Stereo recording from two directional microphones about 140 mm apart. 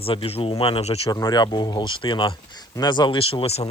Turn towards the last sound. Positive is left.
turn(degrees=45)  # may be behind; listen again after turning